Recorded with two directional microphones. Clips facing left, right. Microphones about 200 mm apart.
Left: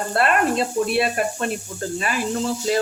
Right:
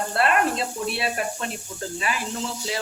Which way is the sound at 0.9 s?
50° left (ahead or behind).